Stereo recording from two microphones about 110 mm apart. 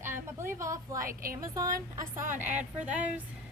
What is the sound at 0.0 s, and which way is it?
A woman's voice, 20° right (ahead or behind).